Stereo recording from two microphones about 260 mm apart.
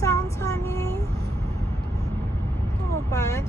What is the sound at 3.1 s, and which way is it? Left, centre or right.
Speech, centre.